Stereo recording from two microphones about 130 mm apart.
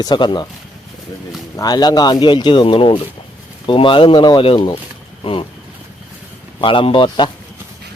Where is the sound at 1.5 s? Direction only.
30° left (ahead or behind).